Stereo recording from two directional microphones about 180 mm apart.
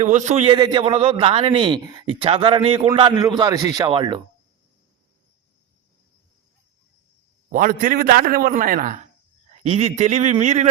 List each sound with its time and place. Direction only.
0.0 s speech: 40° right (ahead or behind)
0.4 s a man's voice: 25° right (ahead or behind)
7.5 s a man's voice: 50° right (ahead or behind)
9.6 s speech: 35° right (ahead or behind)